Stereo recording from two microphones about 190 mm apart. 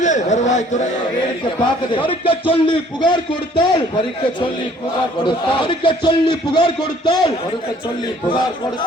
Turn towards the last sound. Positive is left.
turn(degrees=25)  # may be behind; listen again after turning